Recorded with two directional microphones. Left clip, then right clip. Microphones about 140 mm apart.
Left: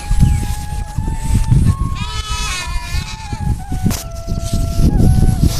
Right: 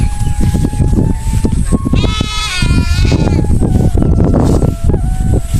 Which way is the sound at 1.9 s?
20° left (ahead or behind).